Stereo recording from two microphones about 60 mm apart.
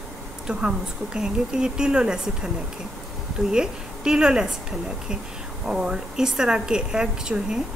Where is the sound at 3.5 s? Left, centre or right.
Centre.